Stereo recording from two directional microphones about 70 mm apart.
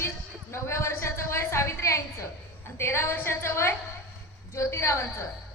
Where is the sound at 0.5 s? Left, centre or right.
Left.